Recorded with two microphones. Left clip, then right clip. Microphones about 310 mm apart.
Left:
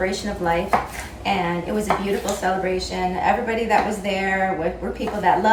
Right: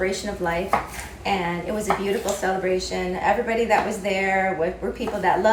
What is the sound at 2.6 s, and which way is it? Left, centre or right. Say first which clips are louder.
A woman's voice: left 1 dB; centre.